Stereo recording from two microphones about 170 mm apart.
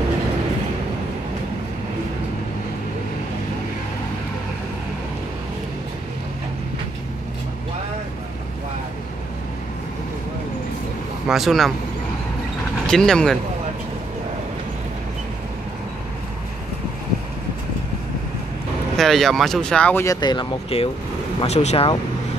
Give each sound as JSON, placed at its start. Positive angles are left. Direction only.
{"t": 11.2, "sound": "speech", "side_deg": 0}
{"t": 12.8, "sound": "speech", "side_deg": 5}
{"t": 18.9, "sound": "speech", "side_deg": 0}
{"t": 20.2, "sound": "speech", "side_deg": 25}